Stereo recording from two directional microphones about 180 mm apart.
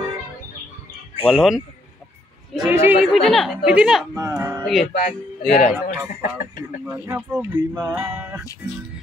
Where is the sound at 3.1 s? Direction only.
Centre (ahead or behind).